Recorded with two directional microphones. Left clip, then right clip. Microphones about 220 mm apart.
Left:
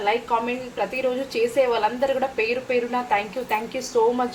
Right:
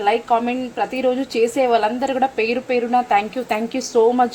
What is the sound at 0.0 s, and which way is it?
A woman's voice, 45° right (ahead or behind).